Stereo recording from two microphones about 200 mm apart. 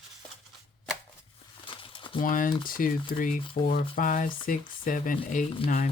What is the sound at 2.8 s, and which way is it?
Speech, 45° left (ahead or behind).